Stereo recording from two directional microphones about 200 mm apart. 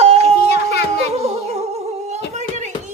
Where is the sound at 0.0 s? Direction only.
30° right (ahead or behind).